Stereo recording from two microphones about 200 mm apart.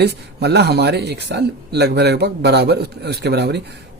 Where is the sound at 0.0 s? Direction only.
55° right (ahead or behind).